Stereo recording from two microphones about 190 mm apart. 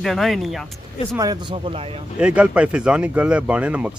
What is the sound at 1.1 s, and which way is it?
Speech, 25° right (ahead or behind).